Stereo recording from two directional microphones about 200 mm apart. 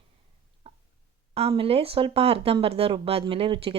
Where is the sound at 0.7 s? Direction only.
30° right (ahead or behind).